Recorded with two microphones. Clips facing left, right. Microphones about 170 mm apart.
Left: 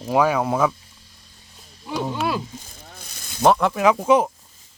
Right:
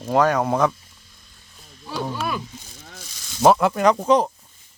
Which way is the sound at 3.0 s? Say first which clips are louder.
Left 1 dB; 55° left (ahead or behind).